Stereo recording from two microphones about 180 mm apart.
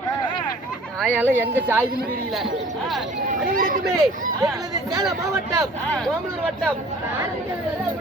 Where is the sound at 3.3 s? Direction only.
50° right (ahead or behind).